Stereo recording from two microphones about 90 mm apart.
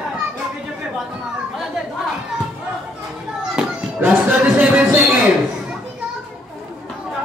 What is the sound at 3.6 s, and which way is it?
Children playing, 5° right (ahead or behind).